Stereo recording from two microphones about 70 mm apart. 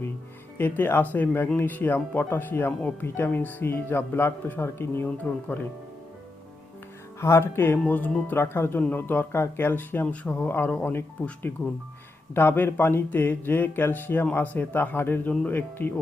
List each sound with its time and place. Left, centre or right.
0.6 s speech: left
7.2 s speech: left
12.3 s speech: left